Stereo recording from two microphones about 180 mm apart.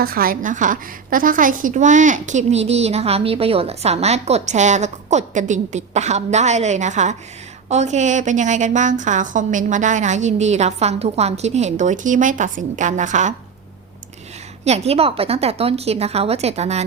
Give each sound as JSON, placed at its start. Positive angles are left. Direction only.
{"t": 0.0, "sound": "a woman's voice", "side_deg": -55}
{"t": 14.6, "sound": "a woman's voice", "side_deg": -35}